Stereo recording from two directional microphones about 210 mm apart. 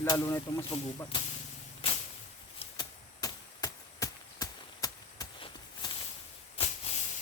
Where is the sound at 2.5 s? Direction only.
20° left (ahead or behind).